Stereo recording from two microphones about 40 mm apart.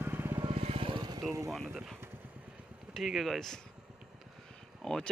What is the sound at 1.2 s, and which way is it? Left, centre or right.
Speech, centre.